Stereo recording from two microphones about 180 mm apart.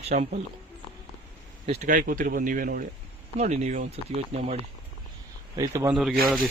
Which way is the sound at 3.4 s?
40° right (ahead or behind).